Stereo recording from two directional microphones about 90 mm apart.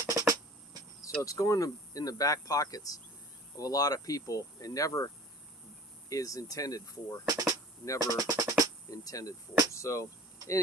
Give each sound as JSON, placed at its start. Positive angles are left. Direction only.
{"t": 0.0, "sound": "music", "side_deg": -40}
{"t": 1.2, "sound": "speech", "side_deg": 40}
{"t": 7.3, "sound": "drum", "side_deg": -45}
{"t": 8.9, "sound": "speech", "side_deg": 40}